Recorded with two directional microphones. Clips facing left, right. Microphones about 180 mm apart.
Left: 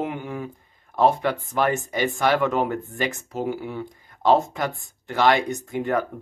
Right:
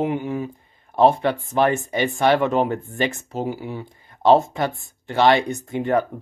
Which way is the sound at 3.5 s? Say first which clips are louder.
Even; 40° right (ahead or behind).